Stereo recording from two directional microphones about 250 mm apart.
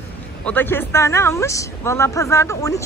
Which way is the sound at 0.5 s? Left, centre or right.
Centre.